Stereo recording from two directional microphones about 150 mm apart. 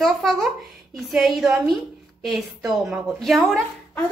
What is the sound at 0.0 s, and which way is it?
A woman's voice, centre (ahead or behind).